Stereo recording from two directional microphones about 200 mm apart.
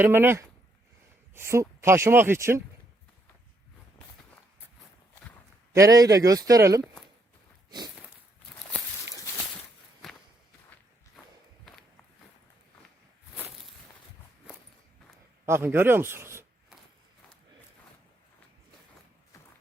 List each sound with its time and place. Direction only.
0.0 s speech: 10° right (ahead or behind)
5.7 s speech: 15° right (ahead or behind)
6.8 s speech: centre (ahead or behind)
8.7 s walk: 5° left (ahead or behind)
13.3 s walk: 5° right (ahead or behind)
15.4 s a man's voice: 10° right (ahead or behind)